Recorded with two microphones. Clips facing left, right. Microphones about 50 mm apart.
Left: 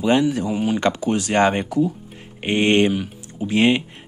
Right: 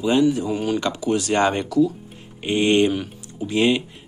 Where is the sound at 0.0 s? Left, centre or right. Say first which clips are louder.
Even; left.